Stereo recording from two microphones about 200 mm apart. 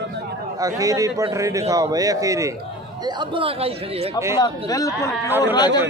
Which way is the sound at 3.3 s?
25° right (ahead or behind).